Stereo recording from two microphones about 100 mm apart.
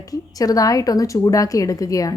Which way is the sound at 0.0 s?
35° left (ahead or behind).